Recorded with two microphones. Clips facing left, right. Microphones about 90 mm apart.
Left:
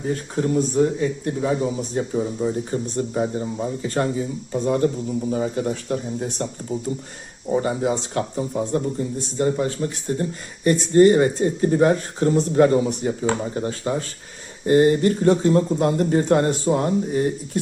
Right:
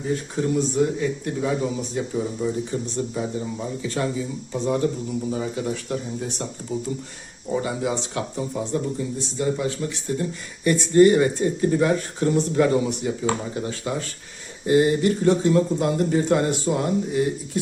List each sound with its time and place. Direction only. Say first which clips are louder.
0.5 s speech: left 3 dB; 30° left (ahead or behind)